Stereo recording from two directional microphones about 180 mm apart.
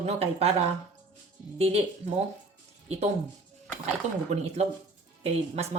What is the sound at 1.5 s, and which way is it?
Speech, 35° right (ahead or behind).